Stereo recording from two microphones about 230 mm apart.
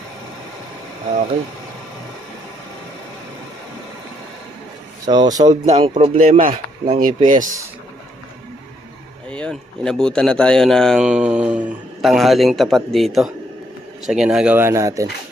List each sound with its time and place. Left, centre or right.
5.0 s speech: centre
5.5 s speech: right
9.3 s speech: centre